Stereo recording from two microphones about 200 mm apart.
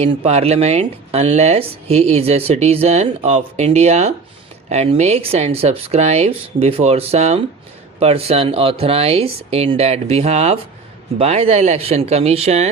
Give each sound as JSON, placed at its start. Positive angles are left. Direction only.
{"t": 0.0, "sound": "speech", "side_deg": -30}